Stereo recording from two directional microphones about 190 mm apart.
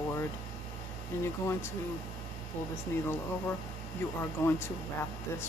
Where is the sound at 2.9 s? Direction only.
10° left (ahead or behind).